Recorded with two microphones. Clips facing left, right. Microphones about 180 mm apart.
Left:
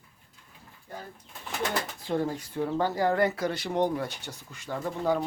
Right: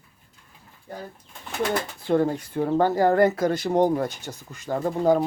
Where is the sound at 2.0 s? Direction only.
60° right (ahead or behind).